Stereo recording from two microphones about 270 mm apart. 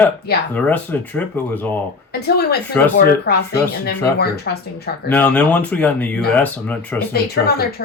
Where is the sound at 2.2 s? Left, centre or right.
Left.